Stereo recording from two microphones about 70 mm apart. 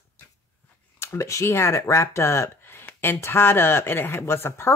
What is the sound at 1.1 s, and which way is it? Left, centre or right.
Speech, left.